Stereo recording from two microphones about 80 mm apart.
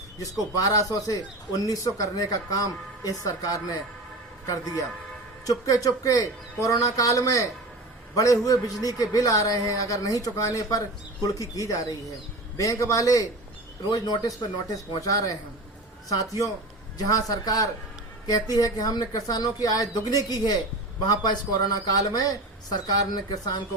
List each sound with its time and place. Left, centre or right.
0.5 s a man's voice: left
13.9 s speech: left